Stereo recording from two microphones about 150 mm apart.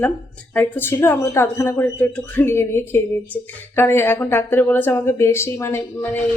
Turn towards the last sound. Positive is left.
turn(degrees=15)  # may be behind; listen again after turning